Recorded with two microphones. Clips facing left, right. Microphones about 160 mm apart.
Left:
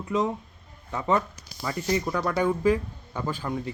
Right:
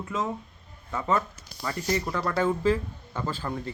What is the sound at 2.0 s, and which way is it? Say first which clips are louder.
Speech: left 2 dB; centre (ahead or behind).